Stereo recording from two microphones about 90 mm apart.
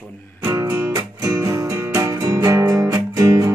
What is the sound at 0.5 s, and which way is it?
Music, 30° right (ahead or behind).